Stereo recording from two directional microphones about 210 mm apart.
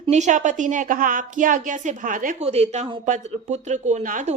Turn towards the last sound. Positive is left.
turn(degrees=-35)  # may be behind; listen again after turning